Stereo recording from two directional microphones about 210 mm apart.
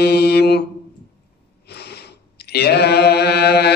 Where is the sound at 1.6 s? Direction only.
50° left (ahead or behind).